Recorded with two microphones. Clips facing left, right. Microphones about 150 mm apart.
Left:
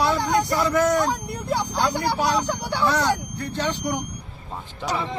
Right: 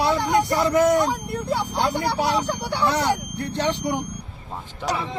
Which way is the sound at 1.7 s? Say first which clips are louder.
Right 1 dB; 25° right (ahead or behind).